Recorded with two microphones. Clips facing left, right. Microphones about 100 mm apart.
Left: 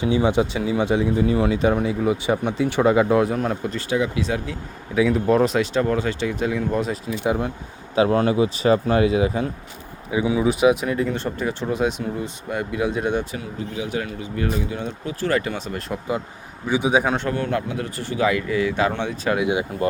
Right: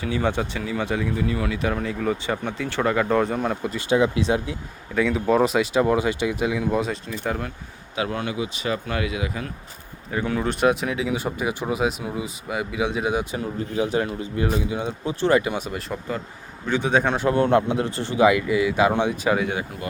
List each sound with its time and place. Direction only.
0.0 s speech: 20° left (ahead or behind)
3.2 s speech: centre (ahead or behind)
3.8 s speech: 25° right (ahead or behind)
4.9 s speech: centre (ahead or behind)
7.3 s speech: 20° left (ahead or behind)
7.9 s speech: 35° left (ahead or behind)
10.1 s speech: 10° left (ahead or behind)
13.7 s a man's voice: 35° right (ahead or behind)
14.7 s speech: 15° right (ahead or behind)
16.6 s a man's voice: 10° left (ahead or behind)
17.2 s speech: 25° right (ahead or behind)
19.7 s speech: 30° left (ahead or behind)